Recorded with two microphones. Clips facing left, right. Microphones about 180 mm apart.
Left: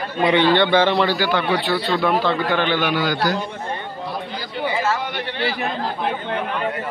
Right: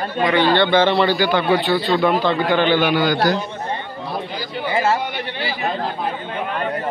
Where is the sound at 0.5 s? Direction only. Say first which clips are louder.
Right 1 dB; 10° left (ahead or behind).